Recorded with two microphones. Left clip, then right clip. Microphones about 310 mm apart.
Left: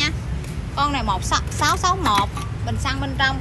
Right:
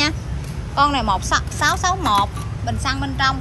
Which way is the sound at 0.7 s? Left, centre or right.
Centre.